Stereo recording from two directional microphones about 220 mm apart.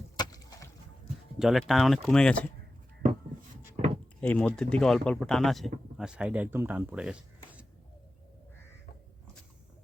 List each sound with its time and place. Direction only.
0.2 s chop: 15° left (ahead or behind)
1.4 s speech: centre (ahead or behind)
4.2 s speech: 5° left (ahead or behind)